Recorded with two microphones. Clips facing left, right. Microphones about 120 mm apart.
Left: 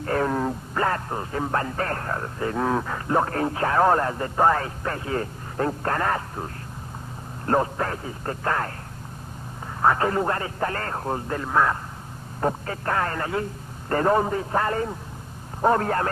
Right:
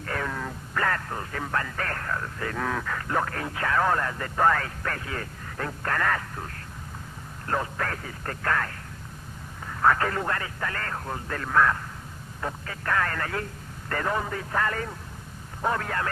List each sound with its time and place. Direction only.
0.0 s speech: 35° left (ahead or behind)
9.8 s speech: 25° left (ahead or behind)
11.3 s speech: 20° left (ahead or behind)
12.4 s speech: 35° left (ahead or behind)
13.9 s speech: 35° left (ahead or behind)